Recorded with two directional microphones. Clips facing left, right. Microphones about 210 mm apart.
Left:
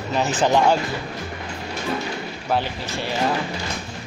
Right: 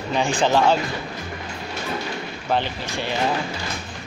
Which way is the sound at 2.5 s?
5° left (ahead or behind).